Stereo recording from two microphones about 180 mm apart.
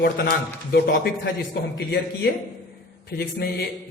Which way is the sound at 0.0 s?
60° left (ahead or behind).